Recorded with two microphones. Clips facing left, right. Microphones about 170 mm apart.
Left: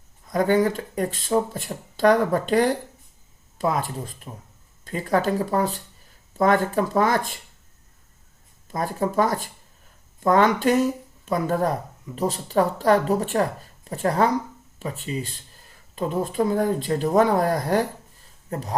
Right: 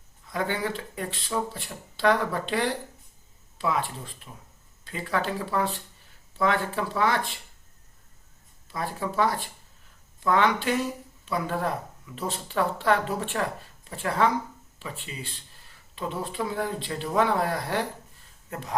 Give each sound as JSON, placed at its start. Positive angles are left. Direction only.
{"t": 0.3, "sound": "speech", "side_deg": 45}
{"t": 8.6, "sound": "speech", "side_deg": 45}